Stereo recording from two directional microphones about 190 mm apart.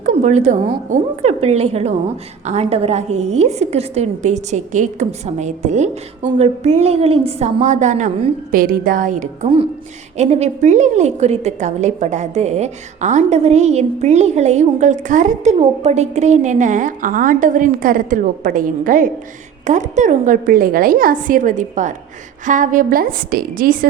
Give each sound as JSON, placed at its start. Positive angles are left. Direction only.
{"t": 0.0, "sound": "a woman's voice", "side_deg": -40}